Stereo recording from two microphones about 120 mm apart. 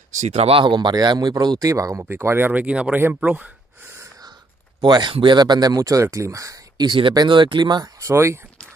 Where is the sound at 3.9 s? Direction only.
25° right (ahead or behind).